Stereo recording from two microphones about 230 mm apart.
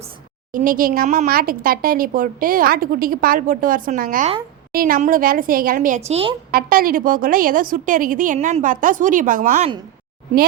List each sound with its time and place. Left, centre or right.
0.5 s speech: right
6.5 s speech: right